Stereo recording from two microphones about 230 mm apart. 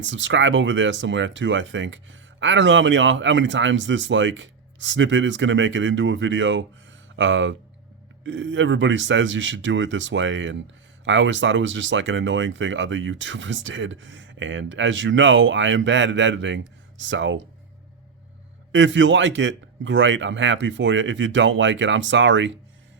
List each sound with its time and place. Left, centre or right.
0.0 s speech: right
18.7 s speech: right